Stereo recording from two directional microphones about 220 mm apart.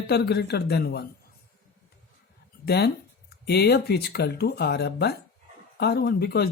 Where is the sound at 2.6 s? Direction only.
50° left (ahead or behind).